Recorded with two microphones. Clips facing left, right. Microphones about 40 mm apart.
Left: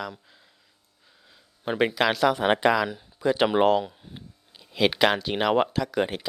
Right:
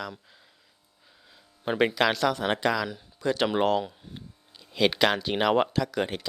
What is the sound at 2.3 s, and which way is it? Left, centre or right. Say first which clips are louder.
Speech: left 5 dB; left.